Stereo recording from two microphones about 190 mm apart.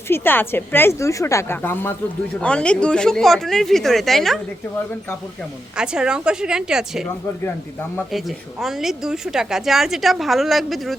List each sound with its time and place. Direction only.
0.1 s a woman's voice: 10° left (ahead or behind)
5.7 s a woman's voice: 5° right (ahead or behind)
7.4 s a woman's voice: 10° left (ahead or behind)
8.1 s a woman's voice: centre (ahead or behind)